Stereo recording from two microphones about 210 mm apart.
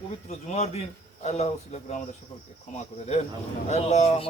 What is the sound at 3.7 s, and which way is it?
Speech, 30° left (ahead or behind).